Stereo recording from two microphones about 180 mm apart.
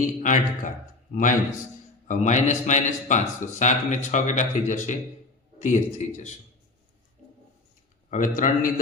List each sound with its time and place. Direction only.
0.0 s a man's voice: 45° left (ahead or behind)
8.1 s a man's voice: 45° left (ahead or behind)